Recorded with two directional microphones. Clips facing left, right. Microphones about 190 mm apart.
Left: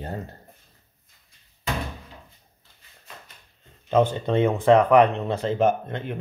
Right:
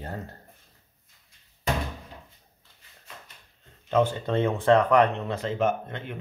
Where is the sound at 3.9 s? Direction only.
20° left (ahead or behind).